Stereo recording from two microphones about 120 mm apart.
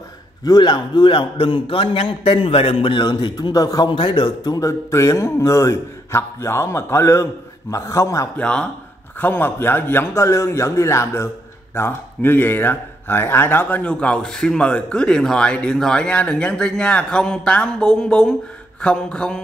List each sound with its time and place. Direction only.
0.4 s a man's voice: 35° left (ahead or behind)
3.9 s a man's voice: 40° left (ahead or behind)
4.6 s a man's voice: 25° left (ahead or behind)
8.4 s a man's voice: 10° left (ahead or behind)